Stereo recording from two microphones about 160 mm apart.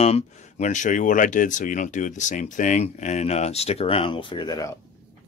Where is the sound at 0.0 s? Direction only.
45° left (ahead or behind); by 4.7 s 25° left (ahead or behind).